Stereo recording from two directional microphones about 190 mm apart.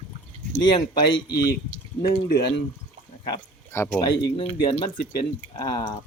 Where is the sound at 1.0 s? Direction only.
55° left (ahead or behind).